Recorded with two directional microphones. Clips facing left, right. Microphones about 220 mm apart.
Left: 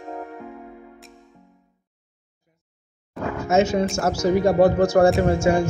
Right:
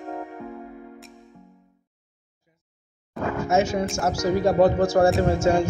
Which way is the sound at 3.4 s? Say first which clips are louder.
Left 4 dB; 20° left (ahead or behind).